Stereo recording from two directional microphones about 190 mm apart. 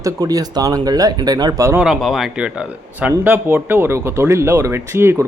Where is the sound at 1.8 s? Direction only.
Centre (ahead or behind).